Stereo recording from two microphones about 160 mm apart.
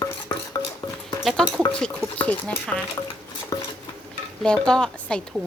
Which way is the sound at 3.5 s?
20° left (ahead or behind).